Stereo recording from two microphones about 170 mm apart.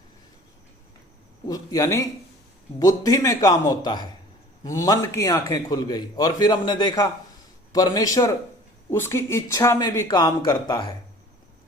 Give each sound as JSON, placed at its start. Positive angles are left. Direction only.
{"t": 1.5, "sound": "a man's voice", "side_deg": 20}